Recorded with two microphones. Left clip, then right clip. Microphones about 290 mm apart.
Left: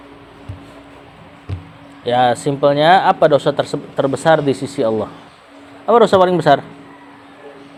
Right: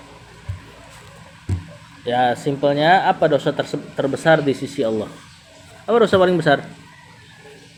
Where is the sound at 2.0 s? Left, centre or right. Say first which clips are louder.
Left 4 dB; left.